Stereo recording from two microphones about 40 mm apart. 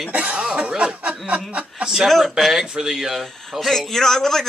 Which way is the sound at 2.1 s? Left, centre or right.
Centre.